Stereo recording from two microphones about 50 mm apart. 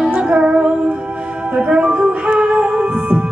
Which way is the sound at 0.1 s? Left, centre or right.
Centre.